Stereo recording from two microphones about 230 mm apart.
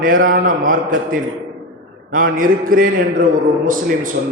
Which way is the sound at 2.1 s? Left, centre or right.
Right.